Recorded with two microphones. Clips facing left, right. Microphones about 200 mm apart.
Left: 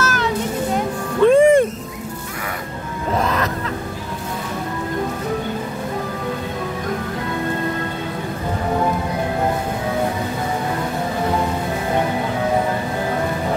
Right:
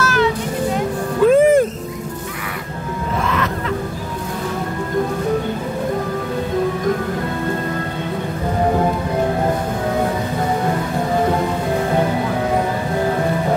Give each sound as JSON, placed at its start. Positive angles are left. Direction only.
{"t": 0.0, "sound": "a sound", "side_deg": 45}
{"t": 1.2, "sound": "music", "side_deg": -5}
{"t": 3.2, "sound": "music", "side_deg": 40}